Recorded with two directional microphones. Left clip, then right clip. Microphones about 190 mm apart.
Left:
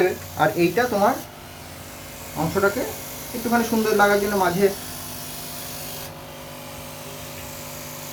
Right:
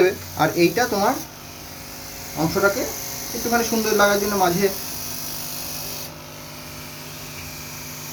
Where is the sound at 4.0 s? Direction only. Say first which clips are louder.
Right 1 dB; centre (ahead or behind).